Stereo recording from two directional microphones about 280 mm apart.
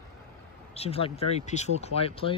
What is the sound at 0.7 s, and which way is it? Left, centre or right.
Speech, left.